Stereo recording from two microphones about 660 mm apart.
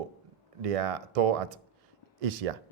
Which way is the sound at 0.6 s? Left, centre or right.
Right.